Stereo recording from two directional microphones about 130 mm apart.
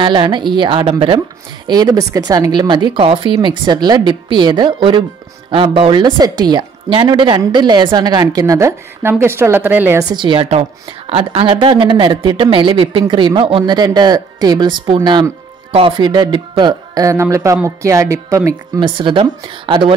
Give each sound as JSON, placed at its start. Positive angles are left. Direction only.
{"t": 0.0, "sound": "a woman's voice", "side_deg": -40}
{"t": 1.7, "sound": "a woman's voice", "side_deg": -30}
{"t": 10.0, "sound": "a woman's voice", "side_deg": -40}
{"t": 16.1, "sound": "speech", "side_deg": -35}
{"t": 18.8, "sound": "a woman's voice", "side_deg": -40}